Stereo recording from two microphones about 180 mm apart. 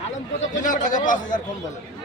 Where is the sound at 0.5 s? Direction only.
45° left (ahead or behind).